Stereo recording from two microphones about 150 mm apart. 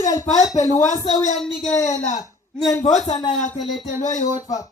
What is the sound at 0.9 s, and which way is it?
Speech, 50° left (ahead or behind).